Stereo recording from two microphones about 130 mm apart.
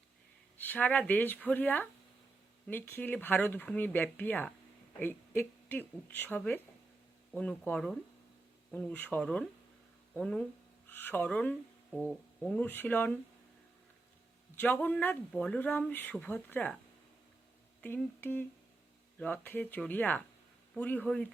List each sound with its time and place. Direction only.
0.5 s speech: 15° left (ahead or behind)
12.6 s speech: 15° left (ahead or behind)
14.5 s speech: 15° left (ahead or behind)
17.7 s speech: 15° left (ahead or behind)